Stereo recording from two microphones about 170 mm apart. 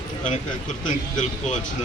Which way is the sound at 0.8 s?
45° left (ahead or behind).